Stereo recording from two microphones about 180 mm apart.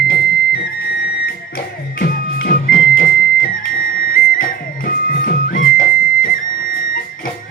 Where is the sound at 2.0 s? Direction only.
60° left (ahead or behind).